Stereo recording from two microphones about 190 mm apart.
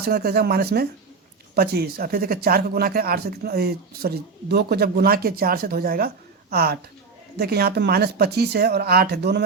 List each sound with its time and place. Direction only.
0.0 s speech: 55° right (ahead or behind)